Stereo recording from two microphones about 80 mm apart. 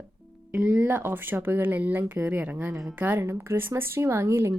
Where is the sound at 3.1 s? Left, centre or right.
Right.